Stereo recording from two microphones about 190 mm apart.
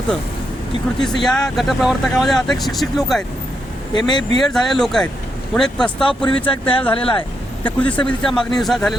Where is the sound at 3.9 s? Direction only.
25° left (ahead or behind).